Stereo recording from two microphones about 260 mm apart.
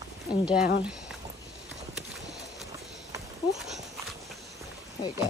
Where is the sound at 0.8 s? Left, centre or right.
Centre.